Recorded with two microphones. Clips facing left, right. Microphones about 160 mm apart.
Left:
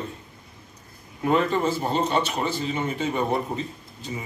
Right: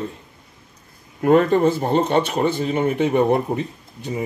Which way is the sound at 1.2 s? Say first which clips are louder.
Right 7 dB; 50° right (ahead or behind).